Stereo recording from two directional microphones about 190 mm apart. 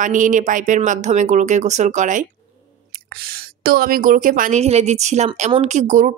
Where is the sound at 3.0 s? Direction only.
55° right (ahead or behind).